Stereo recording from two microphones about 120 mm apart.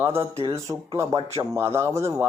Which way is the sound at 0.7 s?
30° right (ahead or behind).